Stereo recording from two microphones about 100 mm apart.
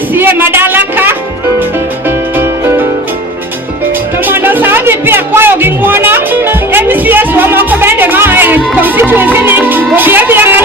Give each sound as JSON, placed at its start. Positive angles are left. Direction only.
{"t": 0.1, "sound": "a sound", "side_deg": -20}
{"t": 2.0, "sound": "music", "side_deg": -20}
{"t": 4.3, "sound": "music", "side_deg": -20}